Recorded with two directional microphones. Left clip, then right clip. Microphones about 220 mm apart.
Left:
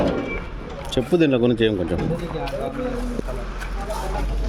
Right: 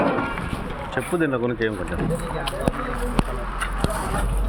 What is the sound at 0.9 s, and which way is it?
Speech, 55° left (ahead or behind).